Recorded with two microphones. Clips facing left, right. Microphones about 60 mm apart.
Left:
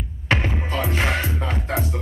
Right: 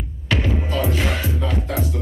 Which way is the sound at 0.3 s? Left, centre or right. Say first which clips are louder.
Right 1 dB; left.